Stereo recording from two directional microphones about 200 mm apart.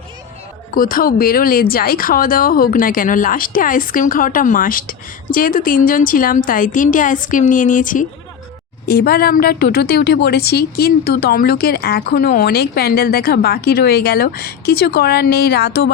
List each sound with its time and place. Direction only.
0.7 s speech: 45° left (ahead or behind)